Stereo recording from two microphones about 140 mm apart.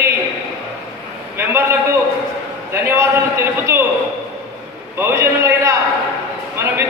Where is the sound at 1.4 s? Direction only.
15° right (ahead or behind).